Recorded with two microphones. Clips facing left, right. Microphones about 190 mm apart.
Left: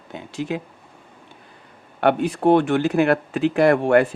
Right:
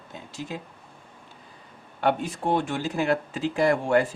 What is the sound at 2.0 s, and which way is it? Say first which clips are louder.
Speech: left 7 dB; 65° left (ahead or behind).